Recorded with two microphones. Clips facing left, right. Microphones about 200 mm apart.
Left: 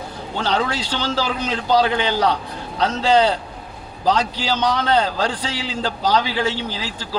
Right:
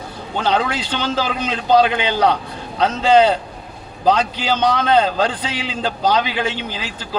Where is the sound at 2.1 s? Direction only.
55° right (ahead or behind).